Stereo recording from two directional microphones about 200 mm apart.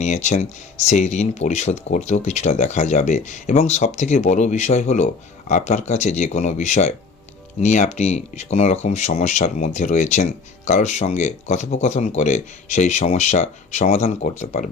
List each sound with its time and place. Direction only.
0.0 s speech: 35° left (ahead or behind)